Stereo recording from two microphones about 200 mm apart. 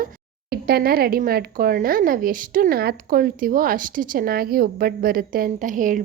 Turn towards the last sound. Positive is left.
turn(degrees=-40)  # may be behind; listen again after turning